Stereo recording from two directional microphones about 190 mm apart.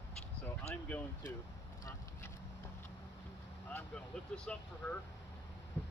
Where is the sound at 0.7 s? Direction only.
5° left (ahead or behind).